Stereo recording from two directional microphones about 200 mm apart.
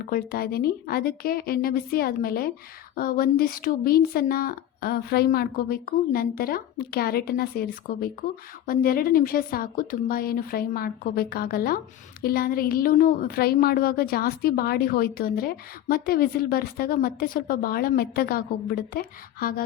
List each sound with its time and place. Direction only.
0.1 s a woman's voice: 50° left (ahead or behind)